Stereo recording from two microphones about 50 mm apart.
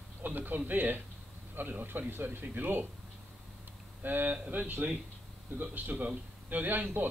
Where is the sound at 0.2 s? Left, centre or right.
Right.